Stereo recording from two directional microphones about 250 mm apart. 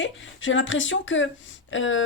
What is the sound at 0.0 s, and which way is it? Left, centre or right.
Speech, left.